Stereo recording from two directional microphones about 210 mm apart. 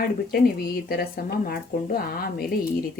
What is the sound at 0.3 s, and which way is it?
Speech, 45° left (ahead or behind).